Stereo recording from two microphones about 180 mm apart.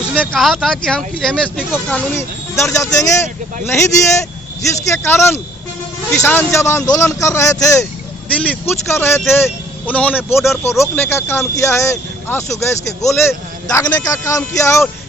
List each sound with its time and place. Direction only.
0.2 s speech: centre (ahead or behind); by 7.9 s 15° left (ahead or behind)
8.3 s speech: 5° left (ahead or behind)